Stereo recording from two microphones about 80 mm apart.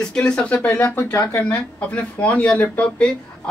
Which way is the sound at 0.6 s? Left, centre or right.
Left.